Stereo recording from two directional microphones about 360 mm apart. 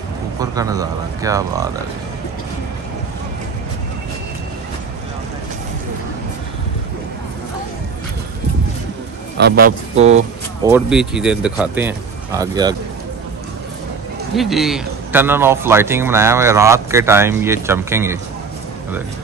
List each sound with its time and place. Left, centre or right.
0.4 s speech: centre
9.4 s speech: right
10.7 s speech: centre
14.3 s speech: centre